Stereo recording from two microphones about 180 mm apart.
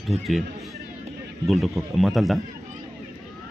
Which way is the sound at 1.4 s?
Centre (ahead or behind).